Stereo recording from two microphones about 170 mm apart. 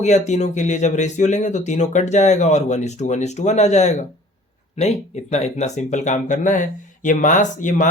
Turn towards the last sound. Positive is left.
turn(degrees=50)  # may be behind; listen again after turning